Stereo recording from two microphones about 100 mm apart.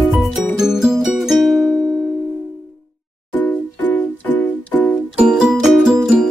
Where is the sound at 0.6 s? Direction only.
5° right (ahead or behind).